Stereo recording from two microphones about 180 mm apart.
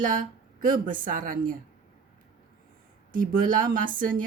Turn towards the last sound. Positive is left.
turn(degrees=-50)  # may be behind; listen again after turning